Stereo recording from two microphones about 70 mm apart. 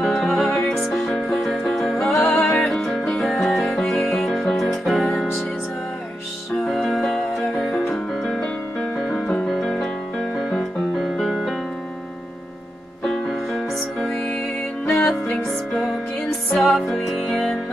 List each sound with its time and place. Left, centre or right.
0.0 s music: centre
1.0 s music: centre
6.7 s music: centre
13.0 s music: centre
14.9 s music: left
16.5 s music: centre